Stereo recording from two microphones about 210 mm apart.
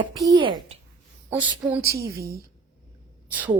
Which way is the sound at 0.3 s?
20° right (ahead or behind).